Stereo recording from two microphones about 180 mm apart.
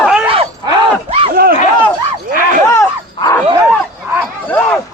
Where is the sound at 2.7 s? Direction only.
15° left (ahead or behind).